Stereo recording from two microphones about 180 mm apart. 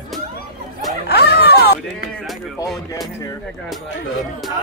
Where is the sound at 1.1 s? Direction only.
65° left (ahead or behind).